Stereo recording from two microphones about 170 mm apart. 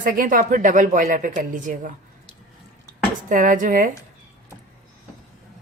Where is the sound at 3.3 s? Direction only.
50° right (ahead or behind).